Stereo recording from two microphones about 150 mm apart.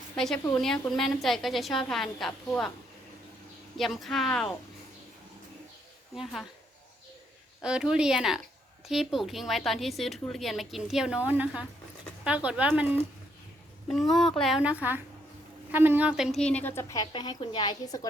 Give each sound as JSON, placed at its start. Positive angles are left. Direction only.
{"t": 0.6, "sound": "a woman's voice", "side_deg": 0}
{"t": 3.8, "sound": "a woman's voice", "side_deg": 0}
{"t": 7.6, "sound": "a woman's voice", "side_deg": -5}
{"t": 17.1, "sound": "a woman's voice", "side_deg": 30}